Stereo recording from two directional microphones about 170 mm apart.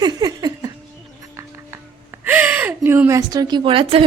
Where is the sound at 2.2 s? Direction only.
10° right (ahead or behind); by 4.0 s 30° right (ahead or behind).